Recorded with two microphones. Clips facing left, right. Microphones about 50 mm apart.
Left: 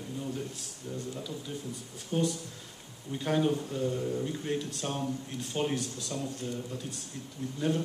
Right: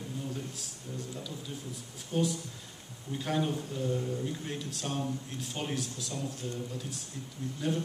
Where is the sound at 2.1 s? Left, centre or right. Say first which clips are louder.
Left 1 dB; centre.